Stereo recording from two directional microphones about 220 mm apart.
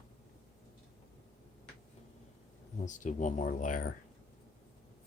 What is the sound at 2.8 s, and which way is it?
Speech, 35° left (ahead or behind).